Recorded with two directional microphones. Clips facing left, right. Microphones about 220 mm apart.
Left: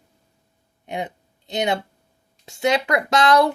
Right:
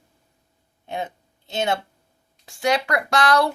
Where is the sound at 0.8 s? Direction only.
15° left (ahead or behind).